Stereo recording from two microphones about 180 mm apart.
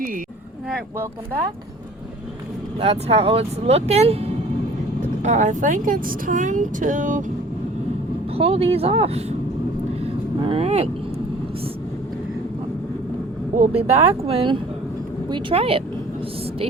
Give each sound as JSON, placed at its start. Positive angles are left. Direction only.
{"t": 2.8, "sound": "speech", "side_deg": -30}
{"t": 8.4, "sound": "speech", "side_deg": -35}
{"t": 10.4, "sound": "speech", "side_deg": -35}
{"t": 13.6, "sound": "speech", "side_deg": -35}